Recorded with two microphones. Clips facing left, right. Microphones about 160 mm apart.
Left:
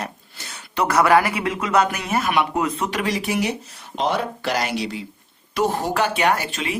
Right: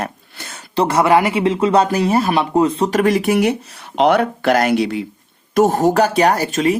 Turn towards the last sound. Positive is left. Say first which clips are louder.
# right 7 dB
turn(degrees=-45)  # may be behind; listen again after turning